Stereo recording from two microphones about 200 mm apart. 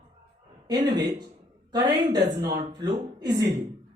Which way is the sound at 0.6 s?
20° right (ahead or behind).